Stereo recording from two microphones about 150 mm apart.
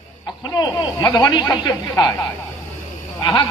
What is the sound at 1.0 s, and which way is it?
A man's voice, 25° left (ahead or behind).